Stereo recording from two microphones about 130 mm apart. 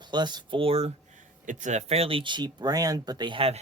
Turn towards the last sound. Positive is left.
turn(degrees=-45)  # may be behind; listen again after turning